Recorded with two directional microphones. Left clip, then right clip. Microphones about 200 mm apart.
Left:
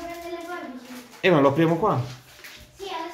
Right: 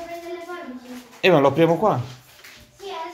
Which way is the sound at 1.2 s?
40° right (ahead or behind).